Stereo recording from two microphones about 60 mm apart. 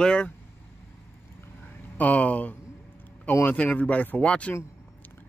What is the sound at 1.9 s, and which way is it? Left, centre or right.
Speech, left.